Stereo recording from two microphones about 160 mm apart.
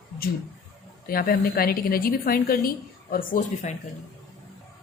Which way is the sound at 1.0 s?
65° left (ahead or behind).